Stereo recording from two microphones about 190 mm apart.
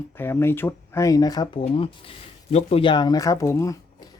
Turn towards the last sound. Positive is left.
turn(degrees=15)  # may be behind; listen again after turning